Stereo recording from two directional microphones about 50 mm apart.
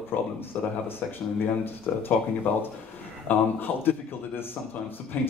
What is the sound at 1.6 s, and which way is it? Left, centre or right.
A man's voice, left.